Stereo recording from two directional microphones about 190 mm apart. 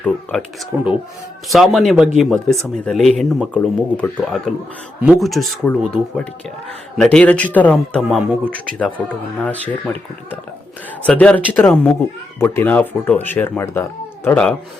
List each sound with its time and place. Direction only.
0.0 s speech: 5° left (ahead or behind)
0.7 s speech: 5° right (ahead or behind)